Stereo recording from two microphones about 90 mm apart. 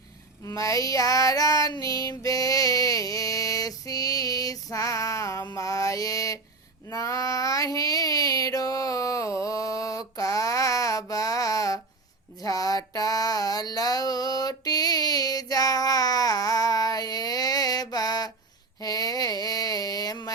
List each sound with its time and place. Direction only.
0.4 s child singing: 40° left (ahead or behind)
5.5 s mantra: 40° left (ahead or behind)
6.8 s child singing: 40° left (ahead or behind)
12.4 s a sound: 45° left (ahead or behind)